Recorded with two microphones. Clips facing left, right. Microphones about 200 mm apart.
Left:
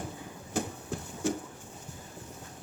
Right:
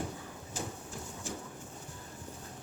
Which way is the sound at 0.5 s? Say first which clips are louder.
Left 8 dB; 65° left (ahead or behind).